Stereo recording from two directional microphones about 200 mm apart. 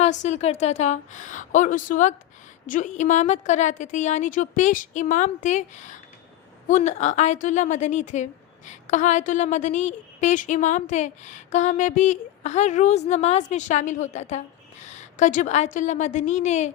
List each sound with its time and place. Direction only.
0.0 s a woman's voice: 35° left (ahead or behind)